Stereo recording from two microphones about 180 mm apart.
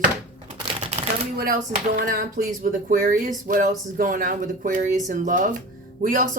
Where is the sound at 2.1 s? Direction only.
50° right (ahead or behind).